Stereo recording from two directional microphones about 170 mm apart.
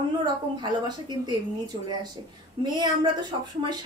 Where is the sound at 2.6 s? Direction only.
25° right (ahead or behind).